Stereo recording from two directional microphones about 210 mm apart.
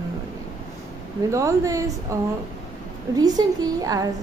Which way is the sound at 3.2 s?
15° right (ahead or behind).